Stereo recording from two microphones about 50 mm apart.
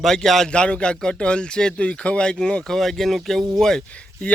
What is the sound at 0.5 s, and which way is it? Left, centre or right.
Speech, left.